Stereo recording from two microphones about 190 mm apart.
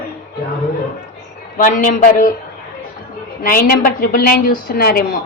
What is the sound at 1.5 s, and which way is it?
Speech, 45° left (ahead or behind).